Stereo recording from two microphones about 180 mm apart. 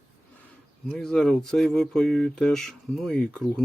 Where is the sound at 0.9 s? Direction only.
Centre (ahead or behind).